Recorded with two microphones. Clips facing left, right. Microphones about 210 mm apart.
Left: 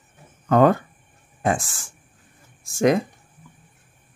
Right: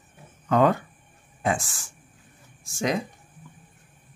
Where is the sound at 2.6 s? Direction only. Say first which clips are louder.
Left 8 dB; 55° left (ahead or behind).